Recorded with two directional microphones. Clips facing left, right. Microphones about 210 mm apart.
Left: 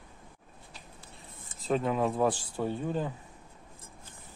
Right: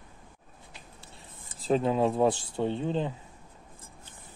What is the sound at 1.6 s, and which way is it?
Speech, 30° right (ahead or behind).